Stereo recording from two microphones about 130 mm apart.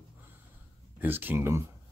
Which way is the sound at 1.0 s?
15° right (ahead or behind).